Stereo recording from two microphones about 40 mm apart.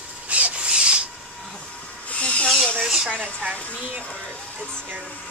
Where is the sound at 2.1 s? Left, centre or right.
Left.